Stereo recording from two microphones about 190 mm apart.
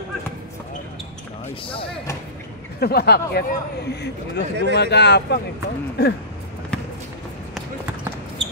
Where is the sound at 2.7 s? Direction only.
55° left (ahead or behind).